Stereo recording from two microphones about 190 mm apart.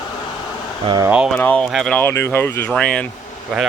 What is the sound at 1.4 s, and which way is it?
Speech, 5° left (ahead or behind).